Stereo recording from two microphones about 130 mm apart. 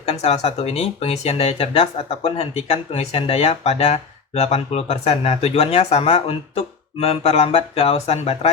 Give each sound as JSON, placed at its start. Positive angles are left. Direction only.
{"t": 0.0, "sound": "speech", "side_deg": 50}